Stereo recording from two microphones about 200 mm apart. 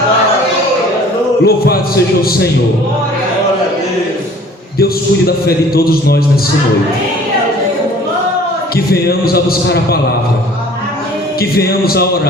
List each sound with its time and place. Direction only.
1.5 s a man's voice: 50° left (ahead or behind)
4.8 s a man's voice: 50° left (ahead or behind)
8.7 s a man's voice: 50° left (ahead or behind)
11.3 s a man's voice: 50° left (ahead or behind)